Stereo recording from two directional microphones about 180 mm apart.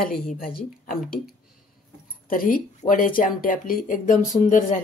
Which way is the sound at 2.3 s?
50° left (ahead or behind).